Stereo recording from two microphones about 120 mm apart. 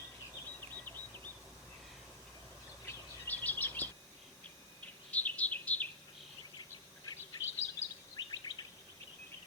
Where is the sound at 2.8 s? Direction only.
15° left (ahead or behind).